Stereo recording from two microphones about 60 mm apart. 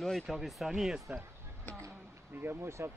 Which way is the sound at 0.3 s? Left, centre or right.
Centre.